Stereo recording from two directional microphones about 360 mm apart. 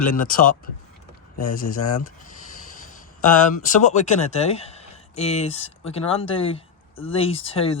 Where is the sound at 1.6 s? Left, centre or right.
Left.